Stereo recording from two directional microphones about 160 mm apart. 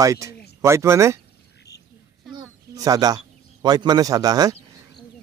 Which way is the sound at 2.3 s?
25° right (ahead or behind).